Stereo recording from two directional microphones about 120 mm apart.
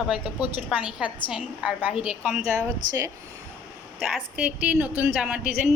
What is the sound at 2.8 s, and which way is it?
Speech, 90° right.